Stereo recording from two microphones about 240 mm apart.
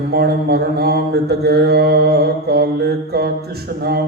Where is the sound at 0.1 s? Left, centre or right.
Right.